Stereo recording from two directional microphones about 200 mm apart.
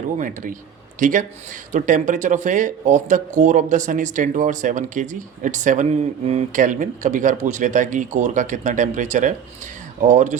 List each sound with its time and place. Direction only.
0.2 s speech: 40° right (ahead or behind)